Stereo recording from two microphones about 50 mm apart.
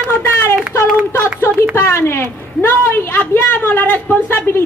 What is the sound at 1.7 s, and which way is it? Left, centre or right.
A woman's voice, left.